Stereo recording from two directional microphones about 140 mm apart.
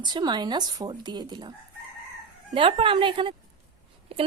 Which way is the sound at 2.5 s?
40° right (ahead or behind).